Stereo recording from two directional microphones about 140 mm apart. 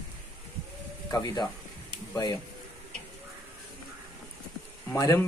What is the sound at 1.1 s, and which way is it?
Speech, 30° left (ahead or behind).